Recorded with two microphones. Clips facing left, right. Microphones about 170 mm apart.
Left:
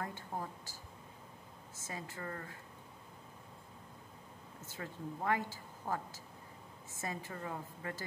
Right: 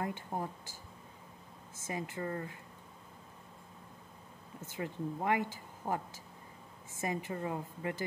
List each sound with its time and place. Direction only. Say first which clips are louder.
0.0 s speech: right 4 dB; 20° right (ahead or behind)
1.9 s speech: right 6 dB; 20° right (ahead or behind)
4.6 s speech: right 6 dB; 15° right (ahead or behind)